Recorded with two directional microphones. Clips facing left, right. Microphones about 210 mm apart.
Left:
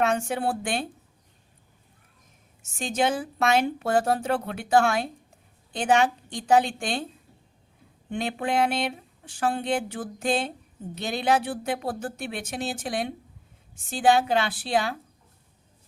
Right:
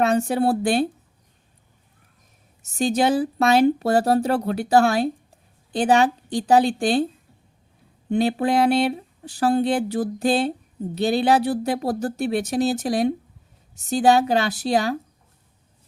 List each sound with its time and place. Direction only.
0.0 s speech: 35° right (ahead or behind)
2.6 s speech: 40° right (ahead or behind)
8.1 s speech: 35° right (ahead or behind)